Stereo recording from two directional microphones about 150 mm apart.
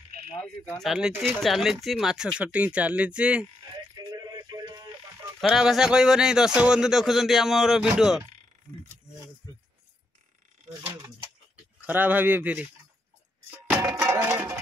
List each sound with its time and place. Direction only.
0.7 s speech: 5° right (ahead or behind)
3.7 s music: 25° right (ahead or behind)
5.4 s speech: centre (ahead or behind)
11.8 s speech: 10° right (ahead or behind)
13.8 s music: 20° right (ahead or behind)